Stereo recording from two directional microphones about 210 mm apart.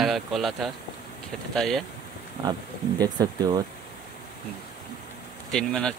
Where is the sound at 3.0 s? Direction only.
20° right (ahead or behind).